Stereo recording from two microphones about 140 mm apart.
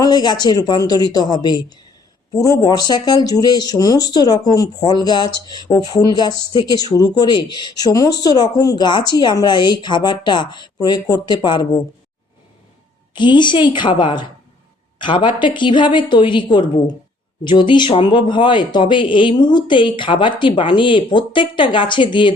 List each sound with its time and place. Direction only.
0.0 s speech: 30° left (ahead or behind)
13.1 s speech: 35° left (ahead or behind)